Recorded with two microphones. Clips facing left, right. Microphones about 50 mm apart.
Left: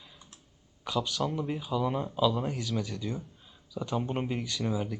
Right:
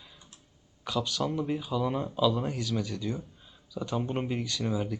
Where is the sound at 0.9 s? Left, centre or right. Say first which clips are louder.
Even; centre.